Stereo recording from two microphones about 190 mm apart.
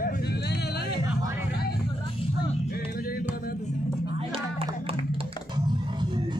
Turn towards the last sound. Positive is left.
turn(degrees=-30)  # may be behind; listen again after turning